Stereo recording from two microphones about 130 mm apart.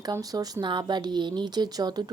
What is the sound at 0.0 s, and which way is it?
Speech, 30° right (ahead or behind).